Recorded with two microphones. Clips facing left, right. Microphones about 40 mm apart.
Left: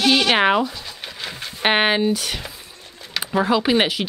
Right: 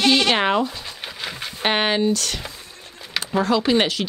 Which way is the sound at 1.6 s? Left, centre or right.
Centre.